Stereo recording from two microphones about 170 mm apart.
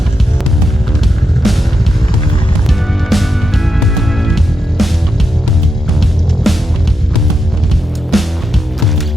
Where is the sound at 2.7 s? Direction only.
Centre (ahead or behind).